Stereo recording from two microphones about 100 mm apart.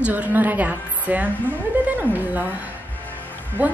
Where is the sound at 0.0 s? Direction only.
15° right (ahead or behind).